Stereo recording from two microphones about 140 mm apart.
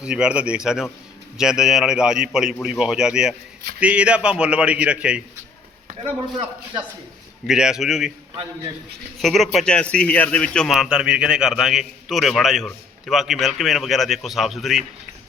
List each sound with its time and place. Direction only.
0.0 s a man's voice: 5° right (ahead or behind)
5.9 s speech: 40° right (ahead or behind)
7.4 s speech: 5° right (ahead or behind)
9.1 s speech: centre (ahead or behind)